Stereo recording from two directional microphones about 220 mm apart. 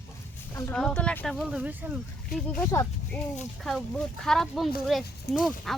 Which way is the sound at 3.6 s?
Centre (ahead or behind).